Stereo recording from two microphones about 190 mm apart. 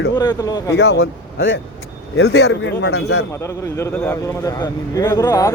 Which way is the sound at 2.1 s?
65° left (ahead or behind).